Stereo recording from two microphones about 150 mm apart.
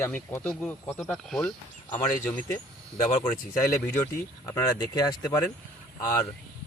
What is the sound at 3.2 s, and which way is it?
Speech, 20° left (ahead or behind).